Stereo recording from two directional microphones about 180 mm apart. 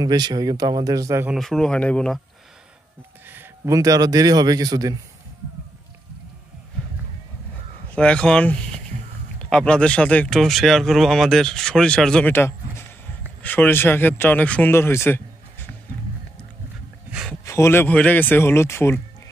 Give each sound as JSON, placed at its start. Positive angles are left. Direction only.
{"t": 0.0, "sound": "speech", "side_deg": -25}
{"t": 1.2, "sound": "speech", "side_deg": 0}
{"t": 3.3, "sound": "a man's voice", "side_deg": -15}
{"t": 7.9, "sound": "speech", "side_deg": 5}
{"t": 17.3, "sound": "speech", "side_deg": 15}